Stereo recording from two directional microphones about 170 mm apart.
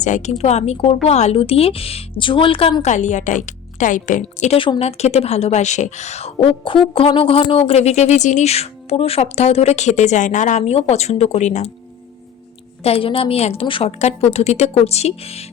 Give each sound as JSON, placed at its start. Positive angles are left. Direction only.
{"t": 0.0, "sound": "speech", "side_deg": 45}
{"t": 12.8, "sound": "speech", "side_deg": 35}